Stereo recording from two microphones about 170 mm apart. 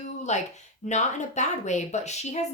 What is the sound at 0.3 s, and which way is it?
Speech, 45° left (ahead or behind).